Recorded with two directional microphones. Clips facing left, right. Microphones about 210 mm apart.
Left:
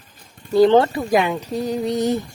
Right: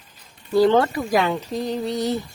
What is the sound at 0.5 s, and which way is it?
Speech, 20° left (ahead or behind).